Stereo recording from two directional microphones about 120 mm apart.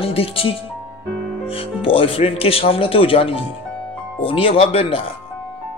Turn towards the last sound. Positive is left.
turn(degrees=50)  # may be behind; listen again after turning